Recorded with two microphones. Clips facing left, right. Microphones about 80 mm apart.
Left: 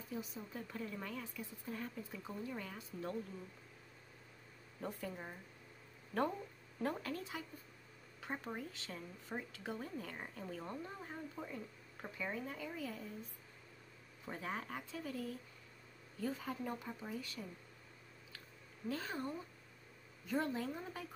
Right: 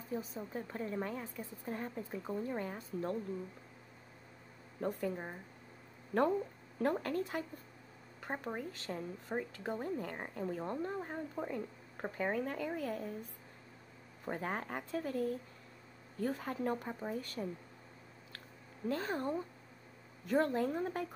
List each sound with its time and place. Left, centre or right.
0.1 s a woman's voice: right
4.7 s a woman's voice: right
6.8 s speech: right
8.5 s a woman's voice: right
14.2 s speech: right
18.9 s speech: right